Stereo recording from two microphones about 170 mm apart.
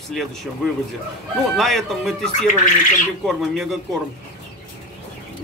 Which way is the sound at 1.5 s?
Centre (ahead or behind).